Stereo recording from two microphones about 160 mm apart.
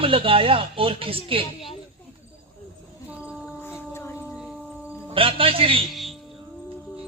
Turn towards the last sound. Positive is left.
turn(degrees=0)  # may be behind; listen again after turning